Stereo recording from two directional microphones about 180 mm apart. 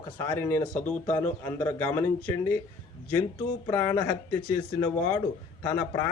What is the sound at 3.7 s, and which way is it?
A man's voice, 15° left (ahead or behind).